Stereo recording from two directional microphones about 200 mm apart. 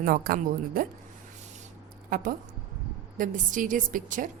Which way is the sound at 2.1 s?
45° right (ahead or behind).